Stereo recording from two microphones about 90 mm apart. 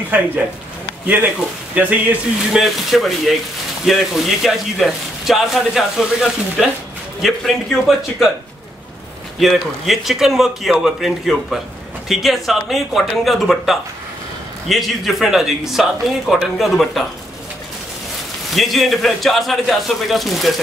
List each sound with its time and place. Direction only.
0.1 s speech: 20° right (ahead or behind)
2.5 s speech: centre (ahead or behind)
9.4 s speech: centre (ahead or behind)
18.5 s speech: centre (ahead or behind)